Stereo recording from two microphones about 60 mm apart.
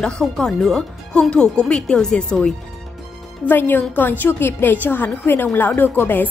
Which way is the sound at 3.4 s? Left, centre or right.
Left.